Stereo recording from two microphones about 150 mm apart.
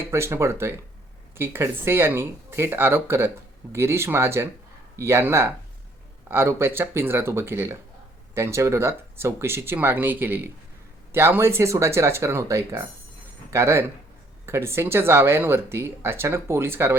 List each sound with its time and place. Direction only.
0.1 s speech: 15° right (ahead or behind)